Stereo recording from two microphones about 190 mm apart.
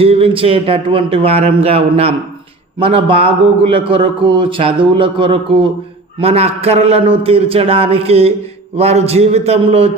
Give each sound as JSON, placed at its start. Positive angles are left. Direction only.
{"t": 0.0, "sound": "a man's voice", "side_deg": -30}